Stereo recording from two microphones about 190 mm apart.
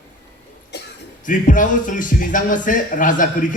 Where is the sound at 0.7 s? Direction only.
60° left (ahead or behind).